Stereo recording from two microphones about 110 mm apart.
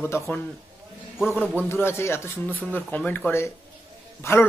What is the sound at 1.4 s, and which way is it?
Speech, 10° right (ahead or behind).